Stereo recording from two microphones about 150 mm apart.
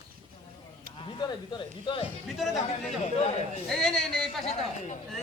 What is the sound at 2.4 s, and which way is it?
Speech, centre (ahead or behind).